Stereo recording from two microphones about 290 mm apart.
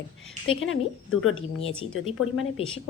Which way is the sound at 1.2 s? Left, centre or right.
Left.